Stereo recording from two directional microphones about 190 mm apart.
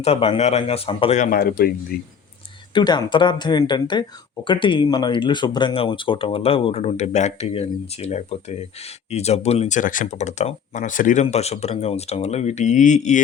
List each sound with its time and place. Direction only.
0.0 s speech: 30° left (ahead or behind); by 2.1 s 50° left (ahead or behind)
2.7 s speech: 25° left (ahead or behind); by 13.2 s 40° left (ahead or behind)